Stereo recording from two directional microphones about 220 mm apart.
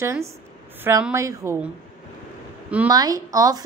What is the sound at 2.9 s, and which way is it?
Speech, 15° right (ahead or behind).